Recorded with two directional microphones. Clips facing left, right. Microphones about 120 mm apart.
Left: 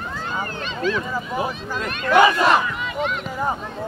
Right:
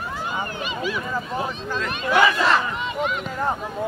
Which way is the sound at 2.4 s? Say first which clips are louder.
Left 3 dB; 15° left (ahead or behind).